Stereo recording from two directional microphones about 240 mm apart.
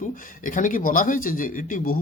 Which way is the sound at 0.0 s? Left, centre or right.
Left.